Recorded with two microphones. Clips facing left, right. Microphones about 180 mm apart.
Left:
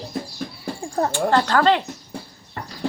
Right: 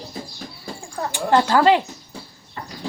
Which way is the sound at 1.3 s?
10° right (ahead or behind).